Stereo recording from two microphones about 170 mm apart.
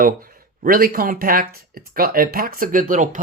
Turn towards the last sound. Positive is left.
turn(degrees=-50)  # may be behind; listen again after turning